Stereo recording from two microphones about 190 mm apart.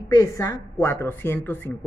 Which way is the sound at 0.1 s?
15° left (ahead or behind).